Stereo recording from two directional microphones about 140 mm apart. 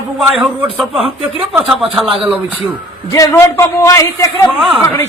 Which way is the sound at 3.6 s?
20° left (ahead or behind).